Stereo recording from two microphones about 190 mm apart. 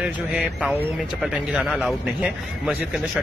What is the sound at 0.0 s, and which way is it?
A man's voice, 5° right (ahead or behind).